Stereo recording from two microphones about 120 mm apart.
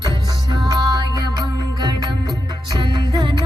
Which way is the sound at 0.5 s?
40° right (ahead or behind).